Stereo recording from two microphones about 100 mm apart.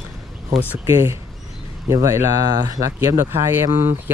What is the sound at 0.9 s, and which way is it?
Speech, 25° right (ahead or behind).